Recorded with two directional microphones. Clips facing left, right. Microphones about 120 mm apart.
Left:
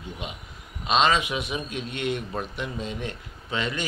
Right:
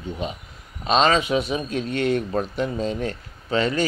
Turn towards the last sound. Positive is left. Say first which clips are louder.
# right 7 dB
turn(degrees=-35)  # may be behind; listen again after turning